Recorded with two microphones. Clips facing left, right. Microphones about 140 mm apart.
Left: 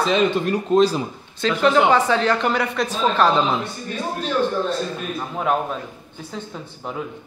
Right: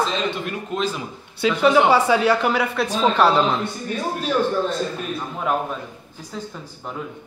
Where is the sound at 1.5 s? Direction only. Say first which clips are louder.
Even; centre (ahead or behind).